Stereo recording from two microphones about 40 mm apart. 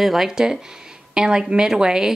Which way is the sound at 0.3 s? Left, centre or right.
Centre.